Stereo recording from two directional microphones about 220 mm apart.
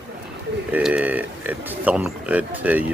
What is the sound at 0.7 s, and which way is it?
Speech, 5° right (ahead or behind).